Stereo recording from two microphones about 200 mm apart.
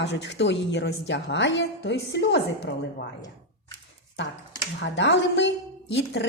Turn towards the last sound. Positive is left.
turn(degrees=60)  # may be behind; listen again after turning